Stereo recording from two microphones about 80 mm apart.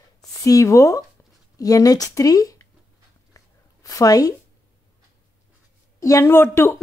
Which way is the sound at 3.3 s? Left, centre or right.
Left.